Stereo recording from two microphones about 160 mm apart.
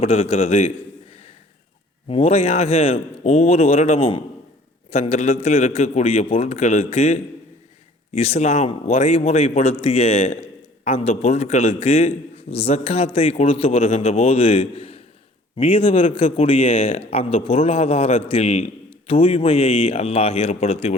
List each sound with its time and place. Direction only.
0.0 s a man's voice: 35° left (ahead or behind)
2.0 s a man's voice: 40° left (ahead or behind)